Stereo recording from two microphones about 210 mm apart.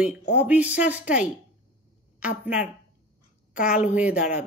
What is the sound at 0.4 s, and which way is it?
Speech, 5° right (ahead or behind).